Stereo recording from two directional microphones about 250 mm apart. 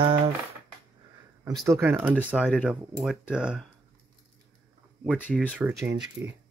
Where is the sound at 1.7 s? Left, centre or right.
Centre.